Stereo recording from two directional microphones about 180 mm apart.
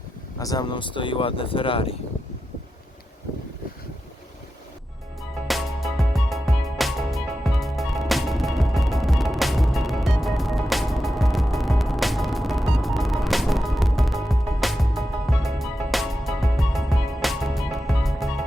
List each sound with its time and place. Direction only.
0.3 s speech: 20° left (ahead or behind)
5.5 s music: centre (ahead or behind)